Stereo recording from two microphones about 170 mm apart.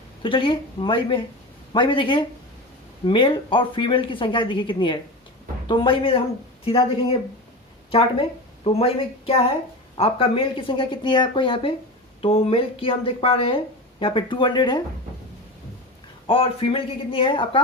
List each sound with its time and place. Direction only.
0.2 s a woman's voice: 30° left (ahead or behind)
8.6 s a woman's voice: 35° left (ahead or behind)
16.2 s speech: 35° left (ahead or behind)